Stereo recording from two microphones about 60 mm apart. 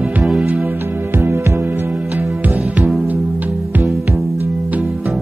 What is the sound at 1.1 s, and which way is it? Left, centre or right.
Music, right.